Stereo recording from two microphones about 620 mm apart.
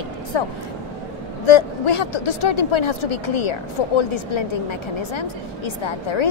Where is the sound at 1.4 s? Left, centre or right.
Left.